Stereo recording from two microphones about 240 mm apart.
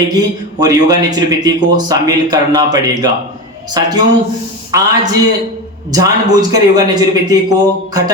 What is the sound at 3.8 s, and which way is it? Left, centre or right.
Speech, centre.